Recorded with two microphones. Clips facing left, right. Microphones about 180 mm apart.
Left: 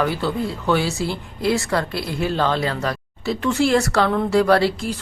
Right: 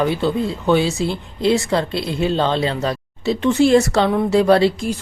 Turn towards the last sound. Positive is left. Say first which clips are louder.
# right 3 dB
turn(degrees=-20)  # may be behind; listen again after turning